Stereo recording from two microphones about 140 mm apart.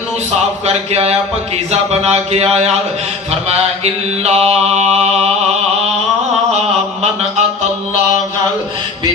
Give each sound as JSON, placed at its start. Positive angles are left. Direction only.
{"t": 0.6, "sound": "mantra", "side_deg": -45}